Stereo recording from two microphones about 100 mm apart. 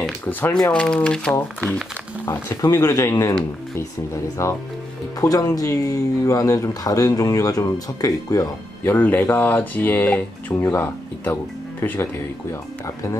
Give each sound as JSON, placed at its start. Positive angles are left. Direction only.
{"t": 0.2, "sound": "speech", "side_deg": 15}
{"t": 2.2, "sound": "speech", "side_deg": 25}
{"t": 8.8, "sound": "speech", "side_deg": 20}